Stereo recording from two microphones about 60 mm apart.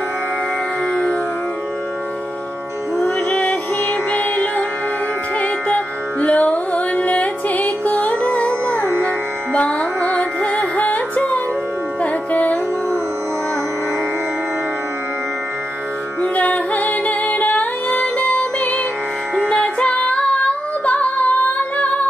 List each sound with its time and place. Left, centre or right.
3.0 s music: centre
16.2 s music: left